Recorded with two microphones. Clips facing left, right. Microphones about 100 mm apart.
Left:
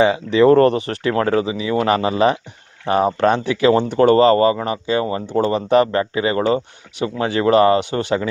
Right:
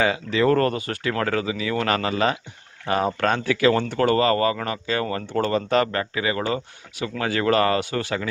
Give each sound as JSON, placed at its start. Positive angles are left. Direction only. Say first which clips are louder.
{"t": 0.0, "sound": "speech", "louder": "left 7 dB", "side_deg": 25}